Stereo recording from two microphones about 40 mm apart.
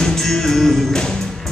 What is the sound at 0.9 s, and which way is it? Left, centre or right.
Music, centre.